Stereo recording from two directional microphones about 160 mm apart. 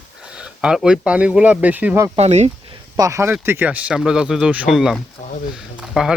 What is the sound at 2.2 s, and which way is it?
Speech, 45° right (ahead or behind).